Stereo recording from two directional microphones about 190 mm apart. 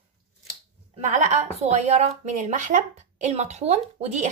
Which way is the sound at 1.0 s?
40° right (ahead or behind).